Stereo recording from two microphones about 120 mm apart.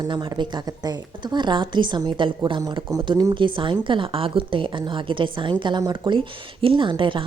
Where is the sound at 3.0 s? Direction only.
40° right (ahead or behind).